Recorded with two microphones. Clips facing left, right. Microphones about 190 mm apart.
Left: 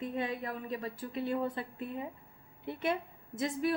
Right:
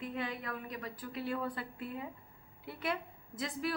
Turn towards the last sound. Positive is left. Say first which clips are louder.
# left 5 dB
turn(degrees=25)  # may be behind; listen again after turning